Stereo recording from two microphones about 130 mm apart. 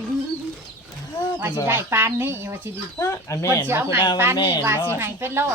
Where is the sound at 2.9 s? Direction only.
25° left (ahead or behind).